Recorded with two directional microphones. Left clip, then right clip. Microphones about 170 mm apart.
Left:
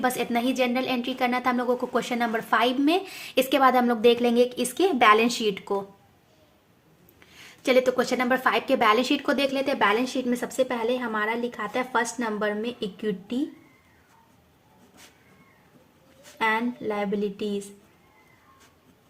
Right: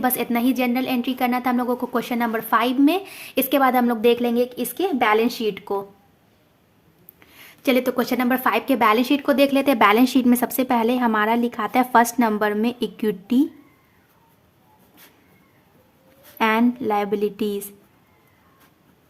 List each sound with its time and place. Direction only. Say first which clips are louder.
0.0 s a woman's voice: right 3 dB; 25° right (ahead or behind)
7.2 s a woman's voice: right 1 dB; 30° right (ahead or behind); by 13.4 s 60° right (ahead or behind)
16.4 s a woman's voice: right 5 dB; 55° right (ahead or behind)